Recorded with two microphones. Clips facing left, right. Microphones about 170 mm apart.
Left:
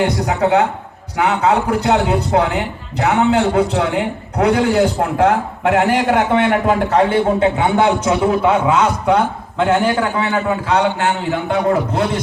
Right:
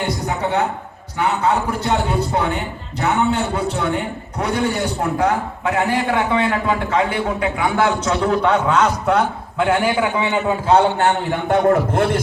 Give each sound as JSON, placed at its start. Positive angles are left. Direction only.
{"t": 1.1, "sound": "a man's voice", "side_deg": 75}
{"t": 6.1, "sound": "a man's voice", "side_deg": 75}
{"t": 6.7, "sound": "a man's voice", "side_deg": 35}
{"t": 7.9, "sound": "a man's voice", "side_deg": 10}
{"t": 10.7, "sound": "a man's voice", "side_deg": -40}